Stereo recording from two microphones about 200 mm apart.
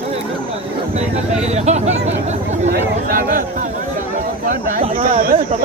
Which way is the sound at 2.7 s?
50° right (ahead or behind).